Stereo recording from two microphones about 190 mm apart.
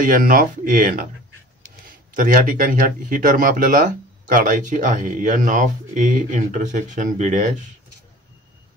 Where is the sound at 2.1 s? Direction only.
45° right (ahead or behind).